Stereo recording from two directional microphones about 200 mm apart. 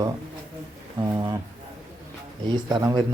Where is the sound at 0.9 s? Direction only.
15° right (ahead or behind).